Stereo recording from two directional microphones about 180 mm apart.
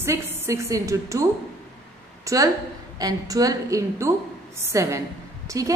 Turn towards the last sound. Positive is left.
turn(degrees=-20)  # may be behind; listen again after turning